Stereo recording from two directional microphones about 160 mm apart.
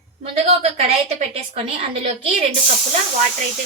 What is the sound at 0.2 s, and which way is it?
A woman's voice, 45° right (ahead or behind).